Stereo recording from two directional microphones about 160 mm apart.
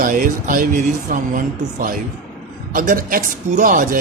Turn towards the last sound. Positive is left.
turn(degrees=-55)  # may be behind; listen again after turning